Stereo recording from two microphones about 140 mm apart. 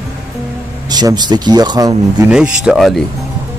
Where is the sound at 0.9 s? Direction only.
30° right (ahead or behind).